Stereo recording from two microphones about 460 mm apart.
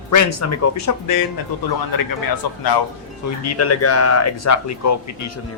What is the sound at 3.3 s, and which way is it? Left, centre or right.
Speech, left.